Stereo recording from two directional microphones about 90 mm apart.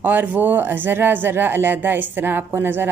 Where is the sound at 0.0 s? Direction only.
20° right (ahead or behind).